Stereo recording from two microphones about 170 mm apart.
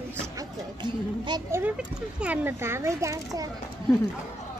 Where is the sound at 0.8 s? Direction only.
25° right (ahead or behind).